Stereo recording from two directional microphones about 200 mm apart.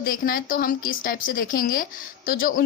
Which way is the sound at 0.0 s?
45° left (ahead or behind).